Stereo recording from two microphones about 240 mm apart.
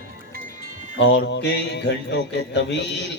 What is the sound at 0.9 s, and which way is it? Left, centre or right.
Speech, left.